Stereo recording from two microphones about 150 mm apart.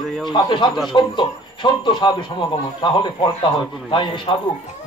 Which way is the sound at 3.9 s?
35° left (ahead or behind).